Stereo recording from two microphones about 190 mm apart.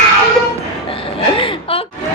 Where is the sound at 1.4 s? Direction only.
25° left (ahead or behind).